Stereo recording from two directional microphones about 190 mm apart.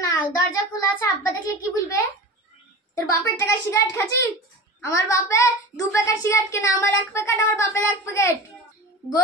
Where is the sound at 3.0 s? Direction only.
15° left (ahead or behind).